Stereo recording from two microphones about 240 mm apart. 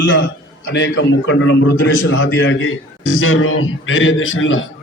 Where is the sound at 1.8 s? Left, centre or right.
Left.